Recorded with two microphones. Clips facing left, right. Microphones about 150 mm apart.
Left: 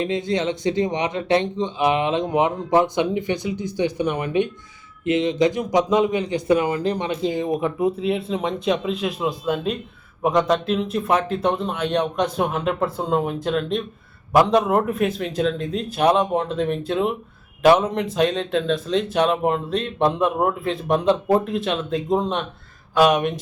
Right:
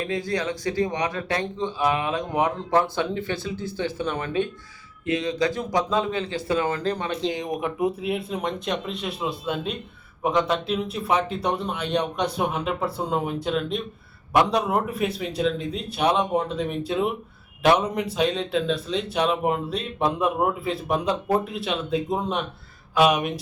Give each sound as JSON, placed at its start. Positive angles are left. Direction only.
{"t": 0.0, "sound": "speech", "side_deg": 20}
{"t": 7.6, "sound": "a man's voice", "side_deg": -10}